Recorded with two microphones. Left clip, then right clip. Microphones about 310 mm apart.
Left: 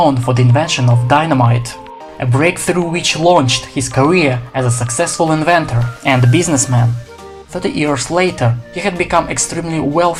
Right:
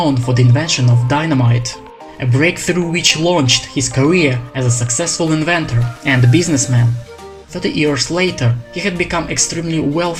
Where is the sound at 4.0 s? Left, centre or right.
Left.